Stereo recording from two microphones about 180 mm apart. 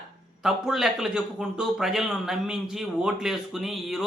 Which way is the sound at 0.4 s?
Centre (ahead or behind).